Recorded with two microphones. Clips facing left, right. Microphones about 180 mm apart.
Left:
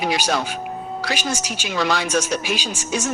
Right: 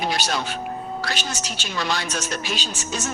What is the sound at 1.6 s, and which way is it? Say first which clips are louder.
Speech: left 5 dB; 80° left.